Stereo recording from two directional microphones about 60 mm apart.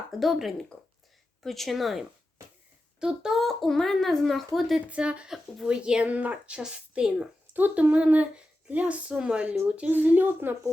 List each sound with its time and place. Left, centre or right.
0.1 s speech: centre
3.0 s a woman's voice: centre
3.3 s speech: centre
4.9 s a woman's voice: centre
6.1 s a woman's voice: right
6.6 s a woman's voice: centre
7.5 s a woman's voice: right